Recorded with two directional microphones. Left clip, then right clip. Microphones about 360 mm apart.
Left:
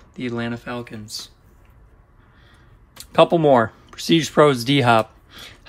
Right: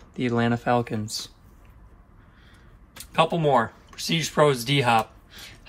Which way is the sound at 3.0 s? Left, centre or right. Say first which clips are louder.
Left 7 dB; centre.